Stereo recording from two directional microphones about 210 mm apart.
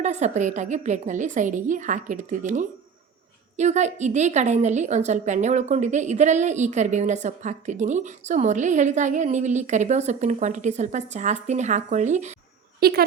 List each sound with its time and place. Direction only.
0.0 s a woman's voice: 35° right (ahead or behind)
12.8 s a woman's voice: 45° right (ahead or behind)